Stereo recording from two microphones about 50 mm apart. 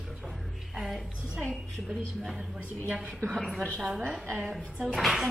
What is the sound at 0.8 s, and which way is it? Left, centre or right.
Speech, centre.